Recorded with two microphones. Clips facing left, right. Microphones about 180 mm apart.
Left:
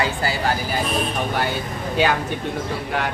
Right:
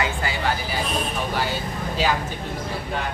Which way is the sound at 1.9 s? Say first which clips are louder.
Left 4 dB; 65° left (ahead or behind).